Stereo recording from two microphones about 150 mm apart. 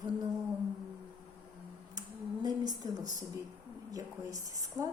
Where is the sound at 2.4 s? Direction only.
25° right (ahead or behind).